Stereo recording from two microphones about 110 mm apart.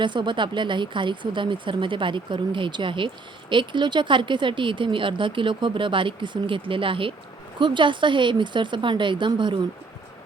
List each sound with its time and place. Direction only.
0.0 s speech: 45° right (ahead or behind)